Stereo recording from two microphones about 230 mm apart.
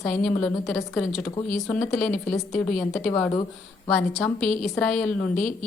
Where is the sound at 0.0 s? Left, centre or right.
Centre.